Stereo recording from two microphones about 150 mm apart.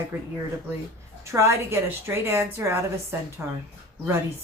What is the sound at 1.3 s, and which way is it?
A woman's voice, 15° right (ahead or behind).